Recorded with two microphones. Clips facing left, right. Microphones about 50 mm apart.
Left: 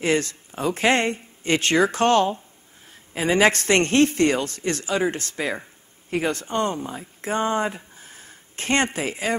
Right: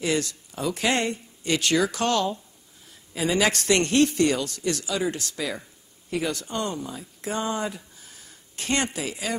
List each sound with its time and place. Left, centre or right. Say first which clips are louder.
0.0 s a woman's voice: left 4 dB; left